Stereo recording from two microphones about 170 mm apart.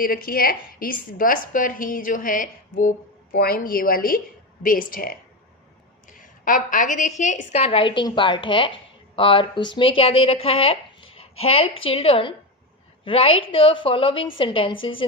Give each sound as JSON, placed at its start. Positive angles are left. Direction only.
{"t": 0.0, "sound": "a woman's voice", "side_deg": 55}
{"t": 3.3, "sound": "a woman's voice", "side_deg": 60}